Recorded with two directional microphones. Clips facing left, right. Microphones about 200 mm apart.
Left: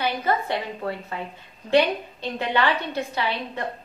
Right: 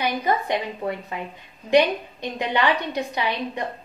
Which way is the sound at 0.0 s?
15° right (ahead or behind).